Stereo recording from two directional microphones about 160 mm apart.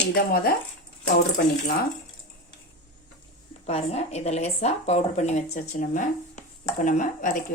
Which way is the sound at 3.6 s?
40° left (ahead or behind).